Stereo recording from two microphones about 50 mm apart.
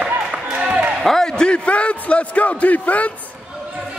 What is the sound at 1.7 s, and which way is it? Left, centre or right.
A man's voice, left.